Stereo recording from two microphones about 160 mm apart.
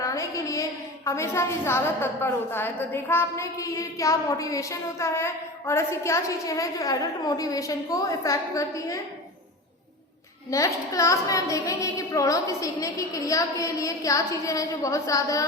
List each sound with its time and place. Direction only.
0.0 s a woman's voice: 20° left (ahead or behind)
10.5 s a woman's voice: 20° left (ahead or behind)